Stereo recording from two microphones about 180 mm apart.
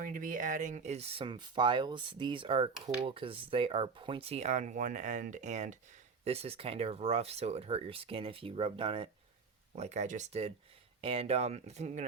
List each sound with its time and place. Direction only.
0.0 s speech: 50° right (ahead or behind)